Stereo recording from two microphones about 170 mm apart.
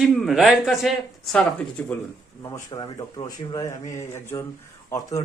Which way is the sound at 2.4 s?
20° left (ahead or behind).